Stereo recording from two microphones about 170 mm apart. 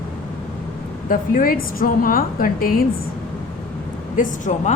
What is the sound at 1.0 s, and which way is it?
A woman's voice, 55° left (ahead or behind).